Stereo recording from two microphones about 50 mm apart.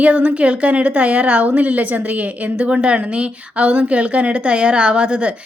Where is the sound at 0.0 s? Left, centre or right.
Right.